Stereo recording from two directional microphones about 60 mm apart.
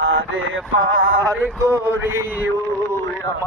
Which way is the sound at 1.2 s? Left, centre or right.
Right.